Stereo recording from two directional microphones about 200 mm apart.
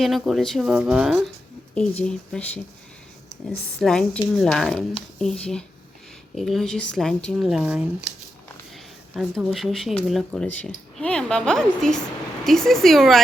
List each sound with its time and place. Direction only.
0.0 s speech: centre (ahead or behind)
3.8 s speech: 5° left (ahead or behind)